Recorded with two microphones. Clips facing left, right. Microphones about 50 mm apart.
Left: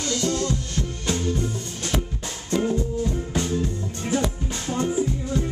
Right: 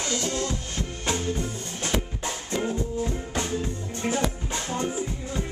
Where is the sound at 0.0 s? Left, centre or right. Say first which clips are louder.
Left 3 dB; centre.